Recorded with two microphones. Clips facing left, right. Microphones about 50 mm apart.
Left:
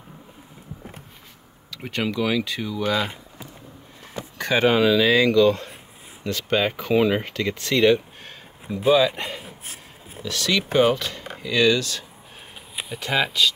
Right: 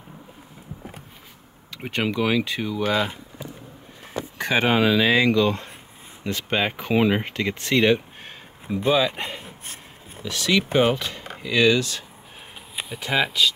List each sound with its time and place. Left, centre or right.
1.7 s speech: right
4.4 s speech: centre
8.6 s speech: centre
9.4 s a sound: centre
10.2 s speech: centre
12.7 s speech: centre